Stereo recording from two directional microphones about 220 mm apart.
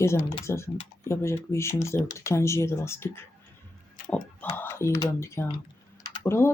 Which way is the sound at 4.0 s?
35° left (ahead or behind).